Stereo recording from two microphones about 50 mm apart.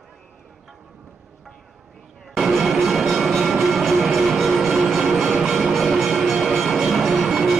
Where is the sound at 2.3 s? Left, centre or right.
Centre.